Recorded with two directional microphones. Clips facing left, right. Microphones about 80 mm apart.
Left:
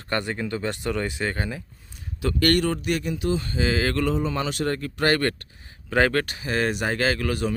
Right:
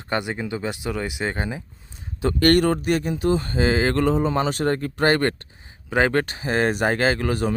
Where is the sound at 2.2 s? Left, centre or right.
Right.